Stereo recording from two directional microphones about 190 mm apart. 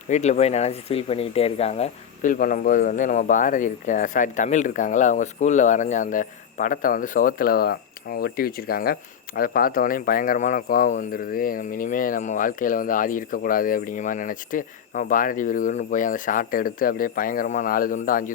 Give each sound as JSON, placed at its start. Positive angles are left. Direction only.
{"t": 0.1, "sound": "speech", "side_deg": 35}
{"t": 2.3, "sound": "speech", "side_deg": 45}